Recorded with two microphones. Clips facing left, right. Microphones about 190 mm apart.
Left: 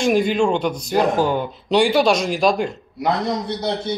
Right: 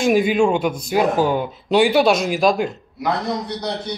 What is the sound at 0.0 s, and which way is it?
Speech, 5° right (ahead or behind).